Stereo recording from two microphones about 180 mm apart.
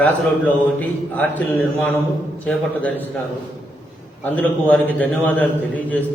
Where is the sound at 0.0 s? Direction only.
10° left (ahead or behind).